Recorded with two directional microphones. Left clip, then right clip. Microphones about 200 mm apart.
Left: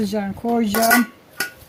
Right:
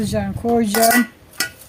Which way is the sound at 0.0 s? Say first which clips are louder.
Right 2 dB; 15° right (ahead or behind).